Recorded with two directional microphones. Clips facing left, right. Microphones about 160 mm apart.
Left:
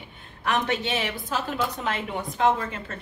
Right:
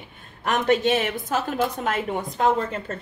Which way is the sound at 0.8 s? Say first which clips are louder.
Right 6 dB; 50° right (ahead or behind).